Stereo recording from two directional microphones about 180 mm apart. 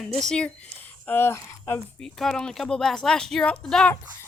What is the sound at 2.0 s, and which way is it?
Speech, 5° left (ahead or behind).